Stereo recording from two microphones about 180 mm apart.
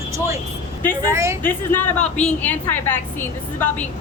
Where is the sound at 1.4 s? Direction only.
10° left (ahead or behind).